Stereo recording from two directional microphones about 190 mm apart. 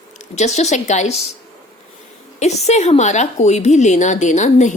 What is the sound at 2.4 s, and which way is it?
Speech, 35° left (ahead or behind).